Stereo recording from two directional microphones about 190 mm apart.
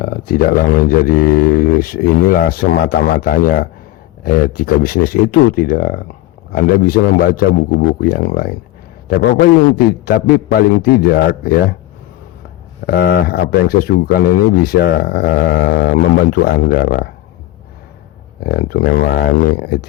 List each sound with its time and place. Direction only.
0.0 s a man's voice: 50° left (ahead or behind)
12.8 s speech: 50° left (ahead or behind)
18.4 s speech: 50° left (ahead or behind)